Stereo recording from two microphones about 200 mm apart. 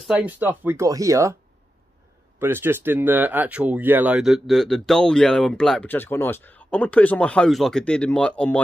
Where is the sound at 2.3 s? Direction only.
10° right (ahead or behind); by 8.6 s 5° left (ahead or behind).